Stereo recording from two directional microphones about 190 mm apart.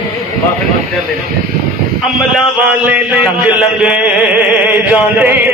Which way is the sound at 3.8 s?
5° right (ahead or behind).